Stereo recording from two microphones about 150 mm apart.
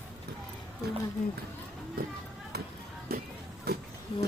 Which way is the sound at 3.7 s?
90° right.